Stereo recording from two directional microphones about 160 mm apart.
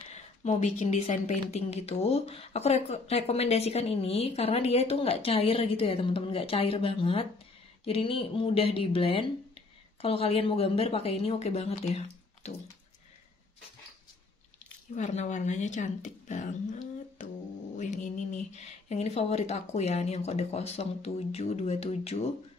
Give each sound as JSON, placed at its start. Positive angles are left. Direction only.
{"t": 0.1, "sound": "speech", "side_deg": 45}
{"t": 15.0, "sound": "speech", "side_deg": 45}